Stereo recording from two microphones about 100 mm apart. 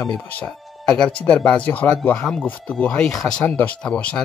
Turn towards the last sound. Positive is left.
turn(degrees=10)  # may be behind; listen again after turning